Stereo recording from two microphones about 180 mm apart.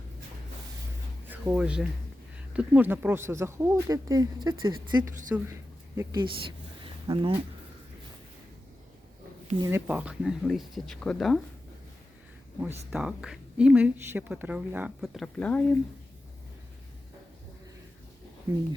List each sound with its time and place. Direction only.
1.3 s speech: 10° right (ahead or behind); by 4.9 s 25° right (ahead or behind)
5.3 s speech: 10° right (ahead or behind)
6.0 s speech: 25° right (ahead or behind)
6.8 s a sound: 30° right (ahead or behind)
9.6 s a woman's voice: 15° right (ahead or behind); by 11.3 s 5° left (ahead or behind)
12.6 s a woman's voice: 5° right (ahead or behind)